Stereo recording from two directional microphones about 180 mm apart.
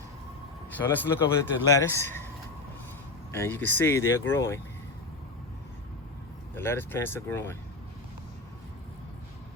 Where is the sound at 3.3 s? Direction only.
15° left (ahead or behind).